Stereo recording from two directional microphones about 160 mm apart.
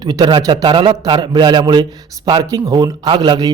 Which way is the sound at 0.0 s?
25° right (ahead or behind).